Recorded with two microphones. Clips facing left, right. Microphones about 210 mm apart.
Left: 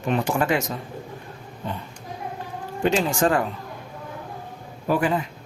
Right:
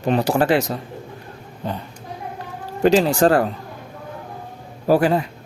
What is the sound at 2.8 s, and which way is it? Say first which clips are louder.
Speech: right 6 dB; 35° right (ahead or behind).